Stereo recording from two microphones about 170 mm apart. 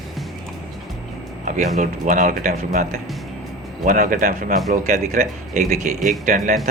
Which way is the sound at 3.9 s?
55° right (ahead or behind).